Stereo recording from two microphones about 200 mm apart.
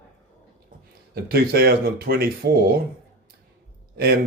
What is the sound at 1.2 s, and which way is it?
Speech, 50° right (ahead or behind).